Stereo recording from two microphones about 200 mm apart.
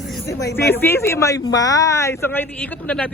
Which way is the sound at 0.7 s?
10° left (ahead or behind).